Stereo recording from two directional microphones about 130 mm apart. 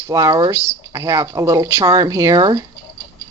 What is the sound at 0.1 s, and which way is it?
Speech, 30° right (ahead or behind).